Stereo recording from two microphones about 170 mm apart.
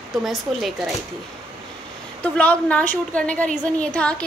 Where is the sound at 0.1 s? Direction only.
Centre (ahead or behind).